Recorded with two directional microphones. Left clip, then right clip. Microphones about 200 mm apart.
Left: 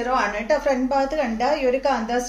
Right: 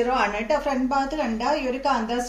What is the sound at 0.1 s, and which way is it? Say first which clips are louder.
Speech: left 2 dB; 15° left (ahead or behind).